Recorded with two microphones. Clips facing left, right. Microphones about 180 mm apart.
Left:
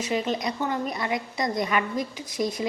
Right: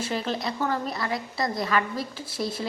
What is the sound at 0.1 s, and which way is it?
A woman's voice, 15° left (ahead or behind).